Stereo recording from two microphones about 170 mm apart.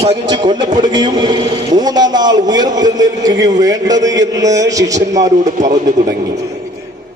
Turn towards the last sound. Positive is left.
turn(degrees=-45)  # may be behind; listen again after turning